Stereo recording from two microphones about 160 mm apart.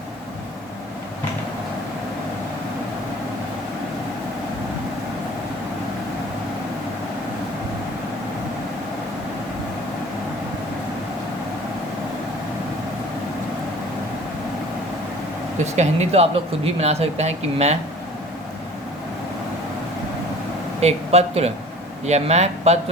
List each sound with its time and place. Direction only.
15.6 s speech: 45° right (ahead or behind)
20.8 s speech: 40° right (ahead or behind)